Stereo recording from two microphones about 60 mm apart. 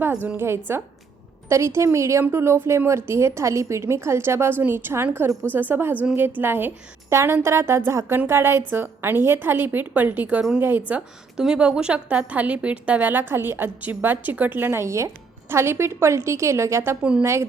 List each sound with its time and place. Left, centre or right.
0.0 s a woman's voice: right
7.1 s a woman's voice: right
11.3 s a woman's voice: centre; by 17.0 s right
17.0 s a woman's voice: centre